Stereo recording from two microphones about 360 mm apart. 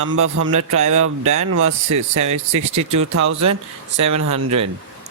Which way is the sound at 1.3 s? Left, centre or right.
Right.